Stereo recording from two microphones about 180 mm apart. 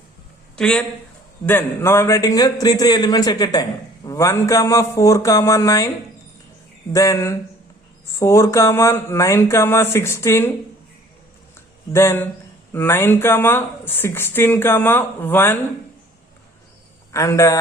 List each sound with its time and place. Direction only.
0.5 s a man's voice: 5° left (ahead or behind)
6.9 s a man's voice: 15° left (ahead or behind)
11.9 s a man's voice: 15° left (ahead or behind)
17.1 s a man's voice: 15° left (ahead or behind)